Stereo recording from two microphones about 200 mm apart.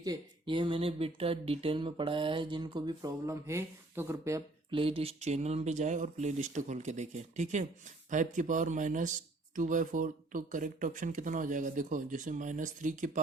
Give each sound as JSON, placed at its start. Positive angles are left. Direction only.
{"t": 0.0, "sound": "speech", "side_deg": -20}
{"t": 4.7, "sound": "speech", "side_deg": -25}